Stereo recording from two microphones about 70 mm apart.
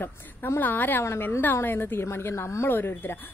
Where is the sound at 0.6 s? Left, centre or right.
Left.